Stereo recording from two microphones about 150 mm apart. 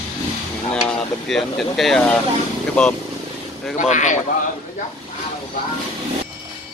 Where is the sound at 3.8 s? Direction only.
55° left (ahead or behind).